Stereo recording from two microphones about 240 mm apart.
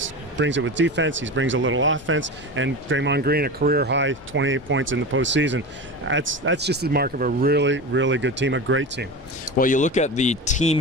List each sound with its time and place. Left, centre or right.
0.0 s speech: right
9.6 s speech: left